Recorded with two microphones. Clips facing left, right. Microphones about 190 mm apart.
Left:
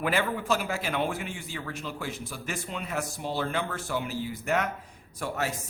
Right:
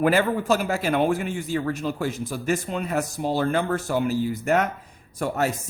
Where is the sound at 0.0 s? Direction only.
45° right (ahead or behind).